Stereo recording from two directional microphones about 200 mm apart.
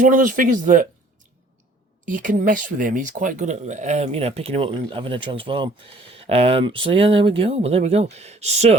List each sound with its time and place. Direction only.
0.0 s speech: 40° right (ahead or behind)
2.0 s speech: 40° right (ahead or behind)